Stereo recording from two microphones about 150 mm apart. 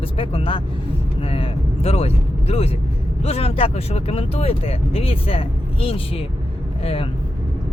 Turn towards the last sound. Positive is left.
turn(degrees=40)  # may be behind; listen again after turning